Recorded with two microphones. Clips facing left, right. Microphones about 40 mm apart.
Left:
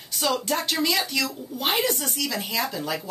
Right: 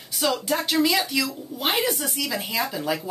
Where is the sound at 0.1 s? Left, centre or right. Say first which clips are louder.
Right 1 dB; centre.